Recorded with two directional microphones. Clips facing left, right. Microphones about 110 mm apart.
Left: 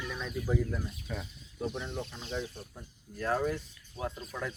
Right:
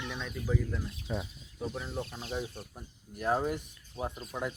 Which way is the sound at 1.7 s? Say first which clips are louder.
Even; 5° right (ahead or behind).